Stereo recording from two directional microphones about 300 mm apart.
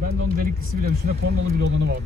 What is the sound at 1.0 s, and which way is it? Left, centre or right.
Speech, right.